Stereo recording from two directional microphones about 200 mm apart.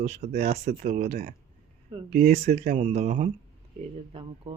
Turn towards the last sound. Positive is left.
turn(degrees=-25)  # may be behind; listen again after turning